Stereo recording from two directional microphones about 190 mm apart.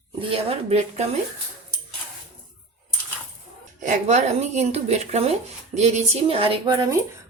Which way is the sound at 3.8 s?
40° right (ahead or behind).